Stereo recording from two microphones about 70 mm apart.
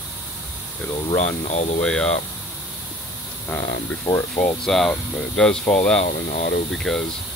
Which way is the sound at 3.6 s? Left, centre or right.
Left.